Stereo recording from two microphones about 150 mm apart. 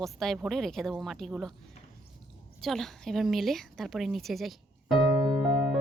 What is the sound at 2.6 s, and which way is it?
A woman's voice, centre (ahead or behind).